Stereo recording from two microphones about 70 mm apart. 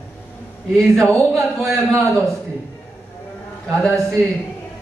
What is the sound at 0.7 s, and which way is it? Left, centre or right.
A man's voice, centre.